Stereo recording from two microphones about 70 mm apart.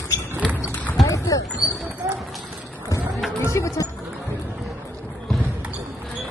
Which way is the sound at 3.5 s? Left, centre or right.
Left.